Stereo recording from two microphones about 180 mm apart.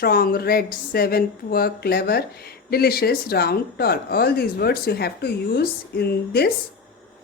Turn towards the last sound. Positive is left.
turn(degrees=60)  # may be behind; listen again after turning